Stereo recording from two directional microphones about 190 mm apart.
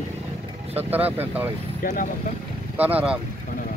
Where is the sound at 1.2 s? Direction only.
10° right (ahead or behind).